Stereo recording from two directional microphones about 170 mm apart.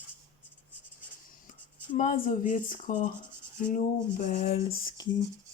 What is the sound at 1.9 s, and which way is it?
Speech, 50° left (ahead or behind).